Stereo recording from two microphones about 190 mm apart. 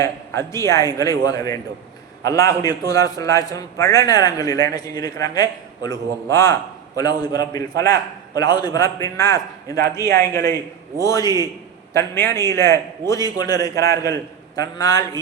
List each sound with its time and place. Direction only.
0.0 s a man's voice: 15° left (ahead or behind)